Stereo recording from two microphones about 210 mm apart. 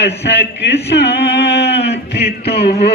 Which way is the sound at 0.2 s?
55° left (ahead or behind).